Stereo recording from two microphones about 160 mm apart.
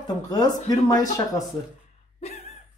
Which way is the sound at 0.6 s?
25° left (ahead or behind).